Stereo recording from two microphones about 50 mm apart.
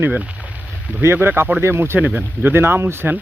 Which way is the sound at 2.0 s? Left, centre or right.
Right.